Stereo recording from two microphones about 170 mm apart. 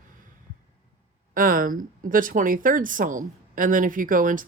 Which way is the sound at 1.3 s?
55° right (ahead or behind).